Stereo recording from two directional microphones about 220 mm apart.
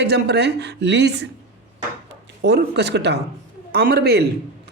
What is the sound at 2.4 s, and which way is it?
Speech, 50° right (ahead or behind).